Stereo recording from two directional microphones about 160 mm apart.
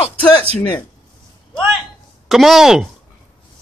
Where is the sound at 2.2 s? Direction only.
Centre (ahead or behind).